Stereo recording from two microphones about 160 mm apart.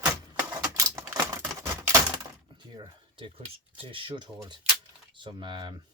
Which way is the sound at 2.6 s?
25° right (ahead or behind).